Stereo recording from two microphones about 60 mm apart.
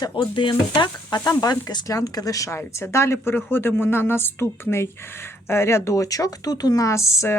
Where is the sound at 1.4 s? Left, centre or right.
Left.